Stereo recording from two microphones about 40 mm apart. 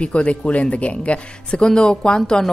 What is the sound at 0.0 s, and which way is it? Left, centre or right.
A woman's voice, left.